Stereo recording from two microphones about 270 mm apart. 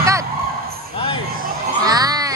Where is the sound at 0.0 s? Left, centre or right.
Centre.